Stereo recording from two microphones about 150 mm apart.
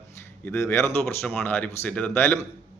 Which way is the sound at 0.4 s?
15° left (ahead or behind).